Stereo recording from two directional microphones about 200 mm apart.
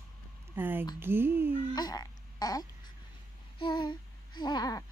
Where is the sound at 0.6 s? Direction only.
10° right (ahead or behind).